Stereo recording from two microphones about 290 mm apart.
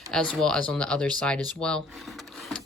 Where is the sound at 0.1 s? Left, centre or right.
Centre.